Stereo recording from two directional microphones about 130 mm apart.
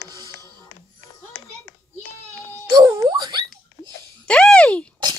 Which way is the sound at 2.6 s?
30° right (ahead or behind).